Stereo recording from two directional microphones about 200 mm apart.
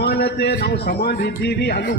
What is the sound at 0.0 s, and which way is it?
A man's voice, 55° left (ahead or behind).